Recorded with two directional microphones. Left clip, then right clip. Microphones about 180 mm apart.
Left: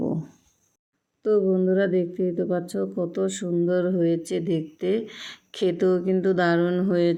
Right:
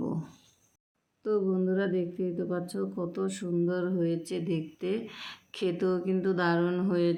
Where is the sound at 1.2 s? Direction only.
25° left (ahead or behind).